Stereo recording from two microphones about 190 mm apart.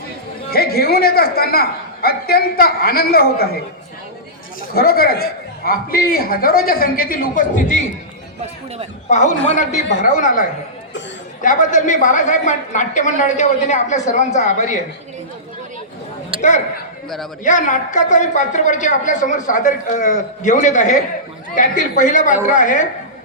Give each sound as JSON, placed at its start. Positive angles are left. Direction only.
{"t": 0.5, "sound": "a man's voice", "side_deg": 55}
{"t": 4.7, "sound": "a man's voice", "side_deg": 50}
{"t": 9.0, "sound": "a woman's voice", "side_deg": 40}
{"t": 11.4, "sound": "a woman's voice", "side_deg": 40}
{"t": 16.3, "sound": "a sound", "side_deg": -30}
{"t": 17.4, "sound": "a woman's voice", "side_deg": 40}